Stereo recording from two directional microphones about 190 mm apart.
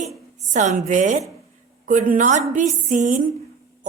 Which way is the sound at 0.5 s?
40° right (ahead or behind).